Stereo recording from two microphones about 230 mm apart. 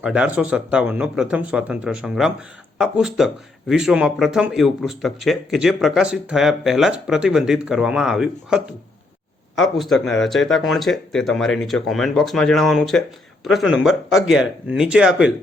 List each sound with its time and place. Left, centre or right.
0.0 s speech: centre